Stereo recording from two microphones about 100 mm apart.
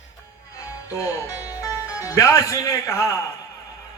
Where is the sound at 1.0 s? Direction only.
35° left (ahead or behind).